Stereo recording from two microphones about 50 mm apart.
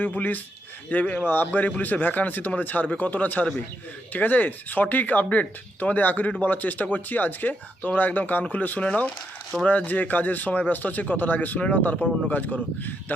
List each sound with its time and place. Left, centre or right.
0.0 s speech: left